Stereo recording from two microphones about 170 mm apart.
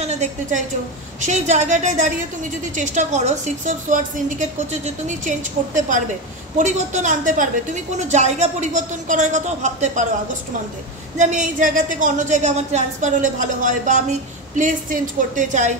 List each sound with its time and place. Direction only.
0.0 s a woman's voice: 45° right (ahead or behind)
11.1 s a woman's voice: 45° right (ahead or behind)